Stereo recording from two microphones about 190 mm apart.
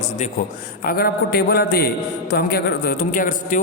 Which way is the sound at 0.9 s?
55° left (ahead or behind).